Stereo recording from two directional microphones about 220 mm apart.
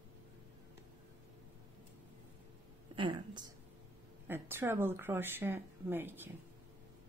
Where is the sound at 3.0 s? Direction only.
20° right (ahead or behind).